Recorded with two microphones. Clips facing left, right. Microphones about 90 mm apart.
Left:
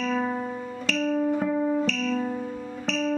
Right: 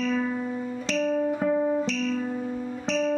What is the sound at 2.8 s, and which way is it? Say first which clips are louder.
Music: right 1 dB; 20° right (ahead or behind).